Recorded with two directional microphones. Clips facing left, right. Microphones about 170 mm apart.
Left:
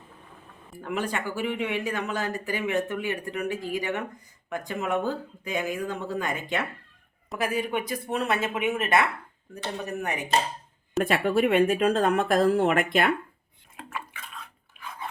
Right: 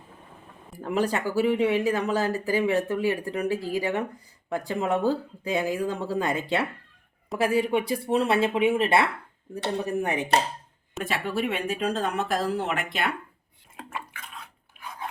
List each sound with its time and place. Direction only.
0.8 s speech: 35° right (ahead or behind)
11.0 s speech: 55° left (ahead or behind)